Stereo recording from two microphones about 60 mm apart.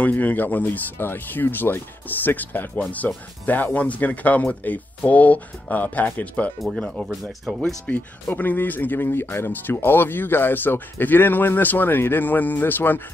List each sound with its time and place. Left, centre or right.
0.0 s speech: left
7.4 s speech: centre
8.3 s speech: left